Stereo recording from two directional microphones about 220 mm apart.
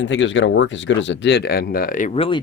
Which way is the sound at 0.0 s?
55° left (ahead or behind).